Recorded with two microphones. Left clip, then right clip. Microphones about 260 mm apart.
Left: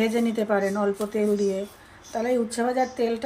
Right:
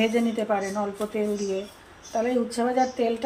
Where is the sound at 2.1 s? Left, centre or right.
Left.